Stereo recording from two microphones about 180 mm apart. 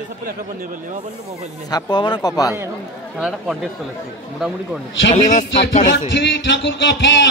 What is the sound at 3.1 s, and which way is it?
Speech, centre (ahead or behind).